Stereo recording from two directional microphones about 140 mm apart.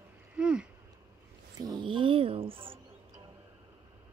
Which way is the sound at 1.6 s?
30° right (ahead or behind).